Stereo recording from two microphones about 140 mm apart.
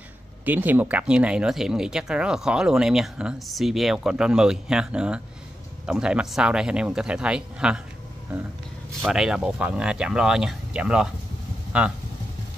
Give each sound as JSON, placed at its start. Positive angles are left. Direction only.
{"t": 0.5, "sound": "speech", "side_deg": -10}
{"t": 9.0, "sound": "speech", "side_deg": -5}